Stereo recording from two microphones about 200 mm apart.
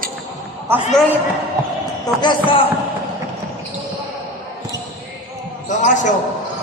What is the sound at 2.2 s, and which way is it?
Speech, 25° left (ahead or behind).